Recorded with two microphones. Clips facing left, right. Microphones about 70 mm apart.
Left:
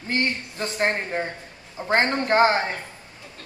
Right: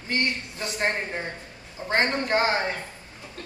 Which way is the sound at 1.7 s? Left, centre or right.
Left.